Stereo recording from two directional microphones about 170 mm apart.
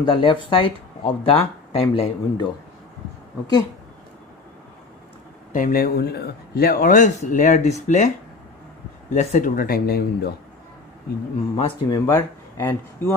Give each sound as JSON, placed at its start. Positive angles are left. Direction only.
{"t": 0.0, "sound": "speech", "side_deg": 30}
{"t": 5.5, "sound": "speech", "side_deg": 55}
{"t": 9.1, "sound": "speech", "side_deg": 45}
{"t": 11.5, "sound": "speech", "side_deg": 30}
{"t": 12.1, "sound": "speech", "side_deg": 15}